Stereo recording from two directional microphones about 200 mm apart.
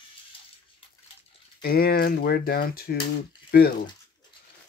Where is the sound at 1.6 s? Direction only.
50° left (ahead or behind).